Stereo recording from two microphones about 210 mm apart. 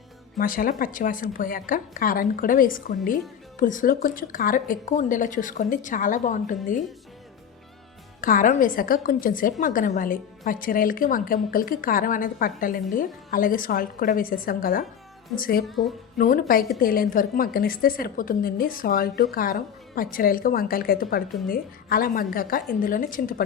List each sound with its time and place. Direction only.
0.3 s a woman's voice: 40° left (ahead or behind)
8.2 s a woman's voice: 40° left (ahead or behind)
15.6 s speech: centre (ahead or behind)
16.1 s a woman's voice: 40° left (ahead or behind)